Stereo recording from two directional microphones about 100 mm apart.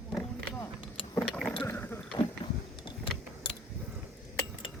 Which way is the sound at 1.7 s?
20° left (ahead or behind).